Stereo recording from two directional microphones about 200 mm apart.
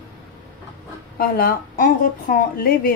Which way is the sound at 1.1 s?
45° left (ahead or behind).